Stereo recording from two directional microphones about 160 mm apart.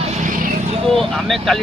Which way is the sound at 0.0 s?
50° right (ahead or behind).